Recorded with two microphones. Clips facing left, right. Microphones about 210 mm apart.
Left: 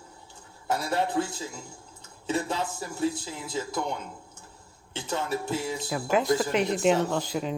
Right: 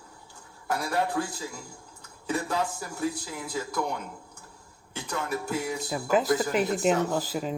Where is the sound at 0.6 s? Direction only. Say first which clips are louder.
Left 1 dB; 25° left (ahead or behind).